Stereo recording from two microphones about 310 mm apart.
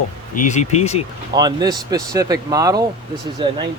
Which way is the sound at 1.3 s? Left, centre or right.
Centre.